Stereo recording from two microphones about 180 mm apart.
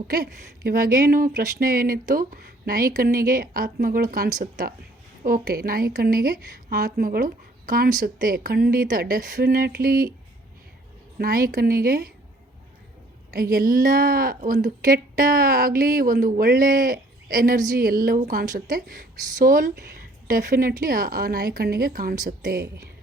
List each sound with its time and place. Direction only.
0.1 s a woman's voice: 55° right (ahead or behind)
11.2 s a woman's voice: 55° right (ahead or behind)
13.3 s a woman's voice: 55° right (ahead or behind)